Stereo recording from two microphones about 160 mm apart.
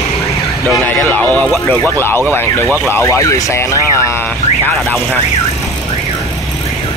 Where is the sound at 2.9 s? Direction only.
20° left (ahead or behind).